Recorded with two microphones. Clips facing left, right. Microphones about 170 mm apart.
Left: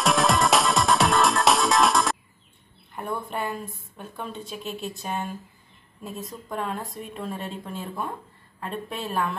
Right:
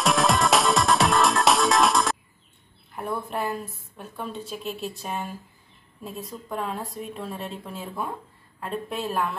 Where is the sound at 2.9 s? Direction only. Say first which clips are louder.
Right 1 dB; centre (ahead or behind).